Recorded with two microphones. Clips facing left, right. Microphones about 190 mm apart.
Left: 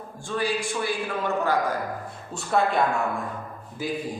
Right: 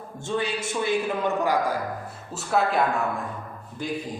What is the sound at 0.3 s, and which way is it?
A man's voice, 25° right (ahead or behind).